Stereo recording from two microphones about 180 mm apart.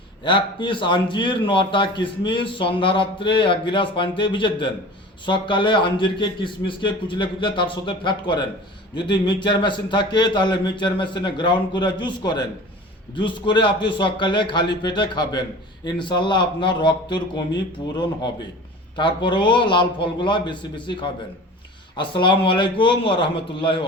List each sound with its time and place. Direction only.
0.3 s a man's voice: 25° left (ahead or behind)